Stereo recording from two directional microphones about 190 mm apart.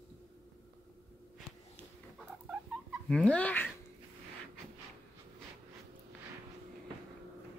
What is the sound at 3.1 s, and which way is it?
Speech, 5° left (ahead or behind).